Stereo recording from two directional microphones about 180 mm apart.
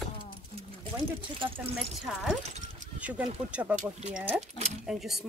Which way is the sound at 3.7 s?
40° right (ahead or behind).